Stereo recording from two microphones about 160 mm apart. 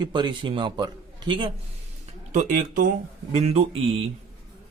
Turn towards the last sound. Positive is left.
turn(degrees=-35)  # may be behind; listen again after turning